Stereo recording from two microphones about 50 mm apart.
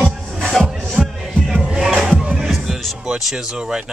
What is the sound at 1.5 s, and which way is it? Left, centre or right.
Music, centre.